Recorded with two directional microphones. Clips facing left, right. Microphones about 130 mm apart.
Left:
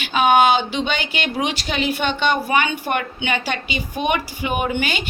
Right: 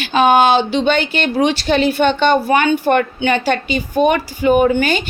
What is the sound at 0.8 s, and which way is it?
Speech, 55° right (ahead or behind).